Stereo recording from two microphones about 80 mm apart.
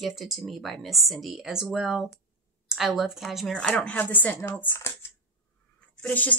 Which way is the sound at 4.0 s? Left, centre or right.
Left.